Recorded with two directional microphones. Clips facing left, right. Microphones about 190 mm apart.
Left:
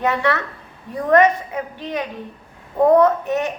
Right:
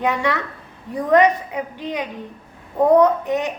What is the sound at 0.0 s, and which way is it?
A woman's voice, 15° right (ahead or behind).